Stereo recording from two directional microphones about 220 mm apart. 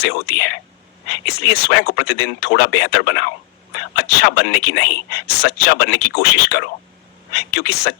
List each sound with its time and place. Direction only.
0.0 s speech: 45° left (ahead or behind)